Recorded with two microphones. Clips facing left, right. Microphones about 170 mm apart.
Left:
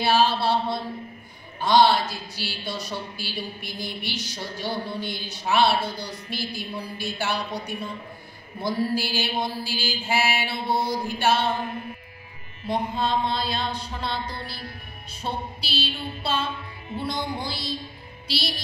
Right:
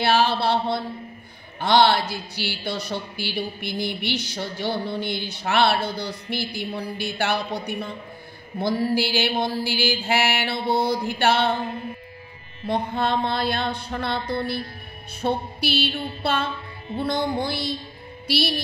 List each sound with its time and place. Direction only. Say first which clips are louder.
0.0 s speech: right 1 dB; 70° right (ahead or behind)
12.6 s mantra: right 2 dB; 60° right (ahead or behind)
18.2 s a woman's voice: right 7 dB; 60° right (ahead or behind)